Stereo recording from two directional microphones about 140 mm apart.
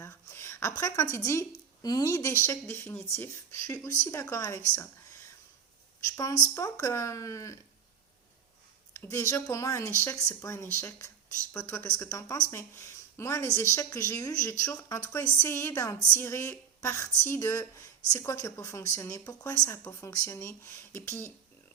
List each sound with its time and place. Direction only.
0.0 s a woman's voice: 20° left (ahead or behind)
4.7 s a sound: 20° left (ahead or behind)
6.1 s speech: 25° left (ahead or behind)
8.9 s a woman's voice: 20° left (ahead or behind)